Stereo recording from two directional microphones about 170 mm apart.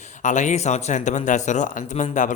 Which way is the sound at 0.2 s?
45° left (ahead or behind).